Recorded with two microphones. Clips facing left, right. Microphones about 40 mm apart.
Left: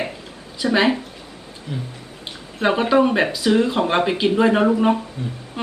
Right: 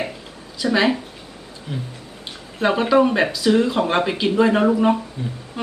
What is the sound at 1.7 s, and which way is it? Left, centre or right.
Speech, right.